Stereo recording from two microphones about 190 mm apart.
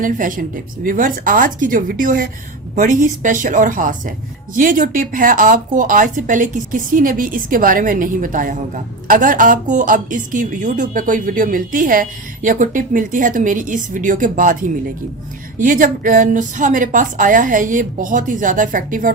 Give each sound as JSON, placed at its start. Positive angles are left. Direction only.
{"t": 0.0, "sound": "speech", "side_deg": -45}